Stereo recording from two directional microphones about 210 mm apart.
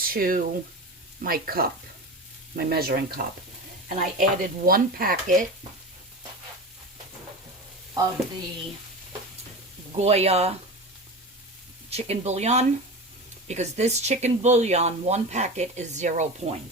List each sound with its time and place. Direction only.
0.0 s speech: 45° right (ahead or behind)
10.0 s speech: 30° right (ahead or behind)
11.9 s speech: 30° right (ahead or behind)